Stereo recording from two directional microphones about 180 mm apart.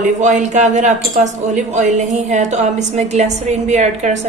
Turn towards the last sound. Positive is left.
turn(degrees=-40)  # may be behind; listen again after turning